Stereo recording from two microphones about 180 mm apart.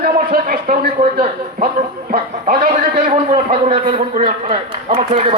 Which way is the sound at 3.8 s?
45° right (ahead or behind).